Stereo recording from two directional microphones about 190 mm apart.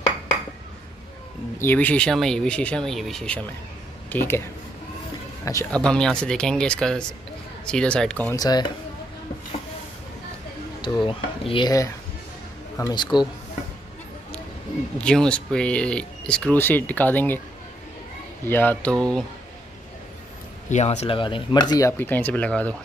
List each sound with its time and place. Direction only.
1.6 s speech: 10° left (ahead or behind)
5.4 s speech: 15° left (ahead or behind)
5.7 s speech: 5° left (ahead or behind)
8.4 s speech: 20° left (ahead or behind)
10.8 s a man's voice: 25° left (ahead or behind)
15.0 s speech: 5° left (ahead or behind)
18.4 s speech: 10° left (ahead or behind)
20.7 s speech: 35° left (ahead or behind); by 22.8 s 5° left (ahead or behind)